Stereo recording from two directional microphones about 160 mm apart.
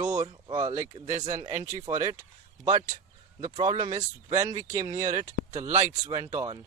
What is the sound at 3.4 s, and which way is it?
Speech, 25° right (ahead or behind).